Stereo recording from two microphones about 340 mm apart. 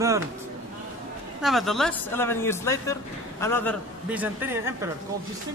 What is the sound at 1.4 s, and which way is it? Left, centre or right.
Speech, centre.